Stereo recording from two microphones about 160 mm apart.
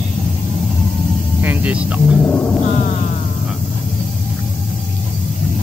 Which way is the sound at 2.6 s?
55° left (ahead or behind).